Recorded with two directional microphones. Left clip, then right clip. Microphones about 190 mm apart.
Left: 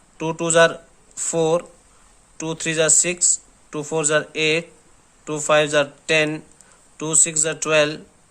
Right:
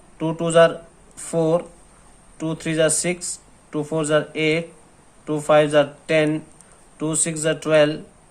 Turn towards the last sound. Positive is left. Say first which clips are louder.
# right 2 dB
turn(degrees=30)  # may be behind; listen again after turning